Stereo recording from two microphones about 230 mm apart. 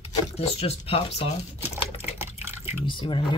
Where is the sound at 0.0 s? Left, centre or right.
Left.